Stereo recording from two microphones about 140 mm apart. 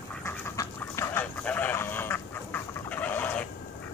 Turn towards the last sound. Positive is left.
turn(degrees=10)  # may be behind; listen again after turning